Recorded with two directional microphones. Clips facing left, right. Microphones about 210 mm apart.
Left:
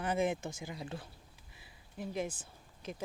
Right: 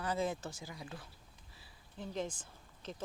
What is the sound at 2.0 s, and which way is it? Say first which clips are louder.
Speech: left 2 dB; 10° left (ahead or behind).